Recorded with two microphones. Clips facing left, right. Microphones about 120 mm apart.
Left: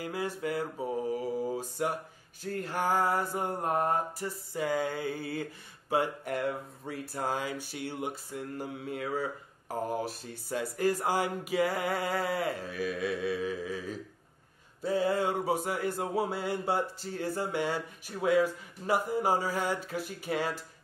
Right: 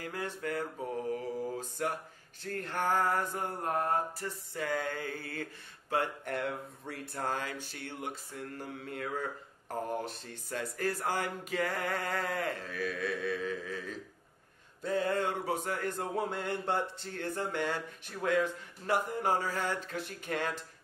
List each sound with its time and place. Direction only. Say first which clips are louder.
0.0 s mantra: left 4 dB; 10° left (ahead or behind)